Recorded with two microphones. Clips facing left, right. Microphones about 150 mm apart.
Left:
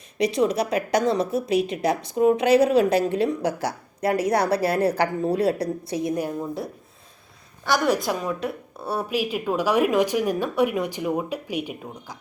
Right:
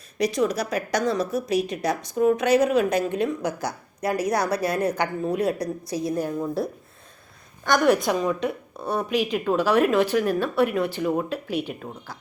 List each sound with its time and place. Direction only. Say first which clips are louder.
0.2 s a woman's voice: left 2 dB; 25° left (ahead or behind)
7.6 s a woman's voice: right 2 dB; centre (ahead or behind)